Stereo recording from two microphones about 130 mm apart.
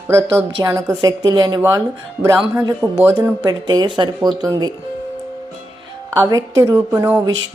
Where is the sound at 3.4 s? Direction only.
30° right (ahead or behind).